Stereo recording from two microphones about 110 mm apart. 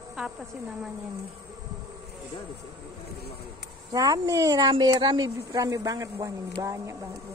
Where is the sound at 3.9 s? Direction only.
35° right (ahead or behind).